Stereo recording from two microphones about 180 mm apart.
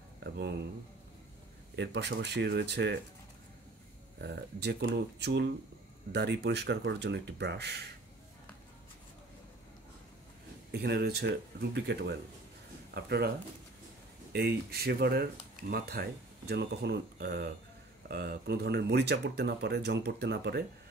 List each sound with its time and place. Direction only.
0.2 s speech: 70° right (ahead or behind)
1.8 s speech: 70° right (ahead or behind)
4.2 s speech: 70° right (ahead or behind)
10.7 s speech: 65° right (ahead or behind)
14.3 s speech: 60° right (ahead or behind)